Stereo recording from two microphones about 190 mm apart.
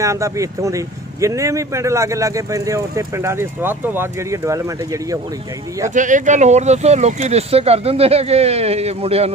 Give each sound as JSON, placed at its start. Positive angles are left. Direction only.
{"t": 0.0, "sound": "speech", "side_deg": -15}
{"t": 5.9, "sound": "speech", "side_deg": -40}